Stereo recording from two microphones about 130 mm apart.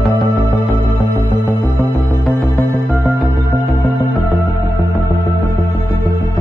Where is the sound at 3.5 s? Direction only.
15° left (ahead or behind).